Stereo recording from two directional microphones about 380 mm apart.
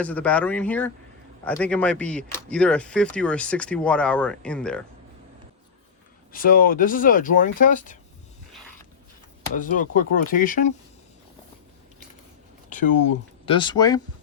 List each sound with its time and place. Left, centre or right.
0.0 s speech: centre
6.3 s speech: left
9.6 s speech: left
13.4 s speech: centre